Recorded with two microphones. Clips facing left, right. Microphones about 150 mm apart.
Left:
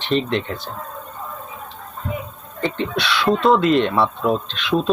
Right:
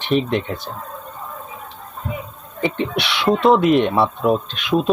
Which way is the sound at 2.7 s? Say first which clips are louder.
Right 1 dB; 15° right (ahead or behind).